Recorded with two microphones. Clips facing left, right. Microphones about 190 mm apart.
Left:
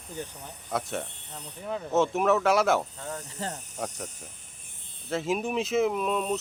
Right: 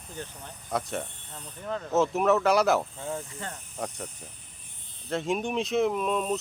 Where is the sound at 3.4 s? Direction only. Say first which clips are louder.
Left 4 dB; 30° left (ahead or behind).